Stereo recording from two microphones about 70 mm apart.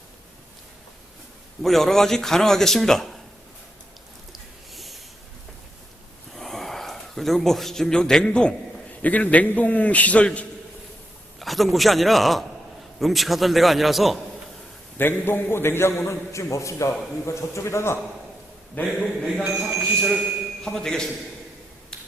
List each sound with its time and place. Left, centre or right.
1.6 s a man's voice: centre
4.3 s a sound: centre
6.3 s a sound: centre
9.0 s a man's voice: left
11.3 s a man's voice: centre
14.9 s a man's voice: left
18.8 s a man's voice: left
19.4 s speech: centre
20.7 s a man's voice: centre